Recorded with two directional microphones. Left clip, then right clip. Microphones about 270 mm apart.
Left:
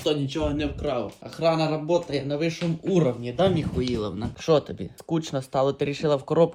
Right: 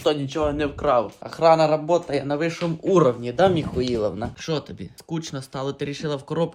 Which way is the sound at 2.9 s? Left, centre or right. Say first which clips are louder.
Right 6 dB; right.